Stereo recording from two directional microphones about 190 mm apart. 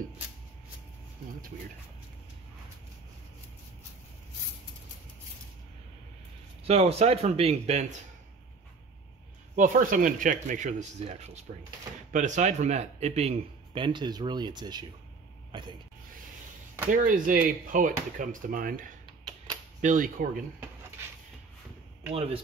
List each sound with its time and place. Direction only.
6.6 s speech: 35° right (ahead or behind)
9.6 s a man's voice: 45° right (ahead or behind); by 15.7 s 25° right (ahead or behind)
16.9 s speech: 45° right (ahead or behind)
19.0 s a sound: 25° right (ahead or behind)
19.8 s speech: 45° right (ahead or behind)